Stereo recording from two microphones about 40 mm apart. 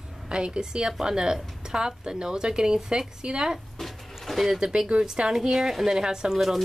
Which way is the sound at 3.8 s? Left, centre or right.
Centre.